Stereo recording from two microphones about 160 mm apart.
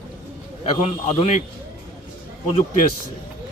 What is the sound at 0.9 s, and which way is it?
Speech, 40° left (ahead or behind).